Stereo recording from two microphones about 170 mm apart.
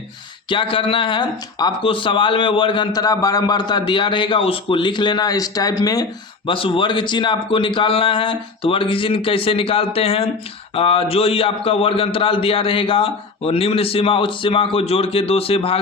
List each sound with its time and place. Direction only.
0.5 s a man's voice: 30° left (ahead or behind)